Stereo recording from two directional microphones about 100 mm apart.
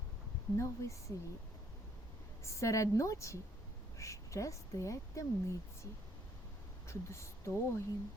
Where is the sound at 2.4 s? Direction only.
30° left (ahead or behind).